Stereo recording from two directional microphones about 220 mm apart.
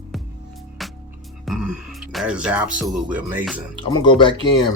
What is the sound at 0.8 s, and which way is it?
Music, centre (ahead or behind).